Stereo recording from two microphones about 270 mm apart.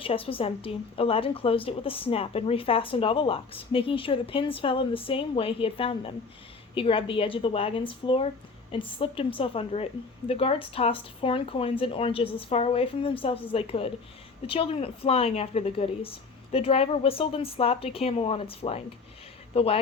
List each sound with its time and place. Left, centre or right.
0.0 s a woman's voice: centre